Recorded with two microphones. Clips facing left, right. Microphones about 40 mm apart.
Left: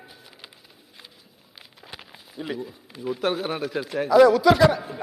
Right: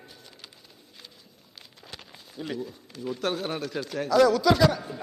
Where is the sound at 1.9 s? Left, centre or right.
Centre.